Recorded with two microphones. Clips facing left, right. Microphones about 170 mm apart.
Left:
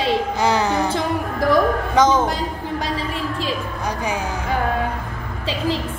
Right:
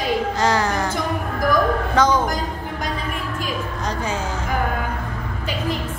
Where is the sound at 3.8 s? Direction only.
15° left (ahead or behind).